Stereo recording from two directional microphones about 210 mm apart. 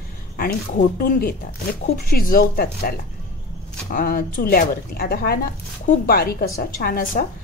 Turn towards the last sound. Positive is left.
turn(degrees=45)  # may be behind; listen again after turning